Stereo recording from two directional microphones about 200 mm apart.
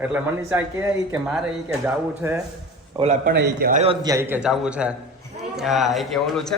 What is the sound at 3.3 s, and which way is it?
Speech, 50° right (ahead or behind).